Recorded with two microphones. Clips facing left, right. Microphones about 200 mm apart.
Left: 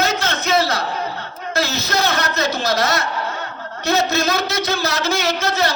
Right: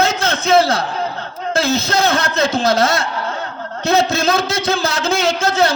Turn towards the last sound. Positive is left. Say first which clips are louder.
# right 3 dB
turn(degrees=-30)  # may be behind; listen again after turning